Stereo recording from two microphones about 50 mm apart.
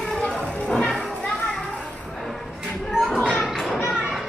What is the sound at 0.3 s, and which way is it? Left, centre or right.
Music, centre.